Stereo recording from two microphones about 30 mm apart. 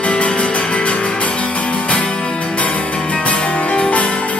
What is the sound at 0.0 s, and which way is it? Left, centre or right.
Music, left.